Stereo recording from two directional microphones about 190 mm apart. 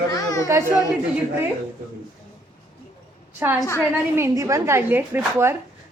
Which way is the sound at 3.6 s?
15° left (ahead or behind).